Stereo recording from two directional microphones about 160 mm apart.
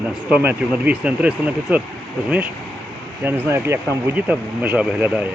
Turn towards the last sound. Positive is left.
turn(degrees=-10)  # may be behind; listen again after turning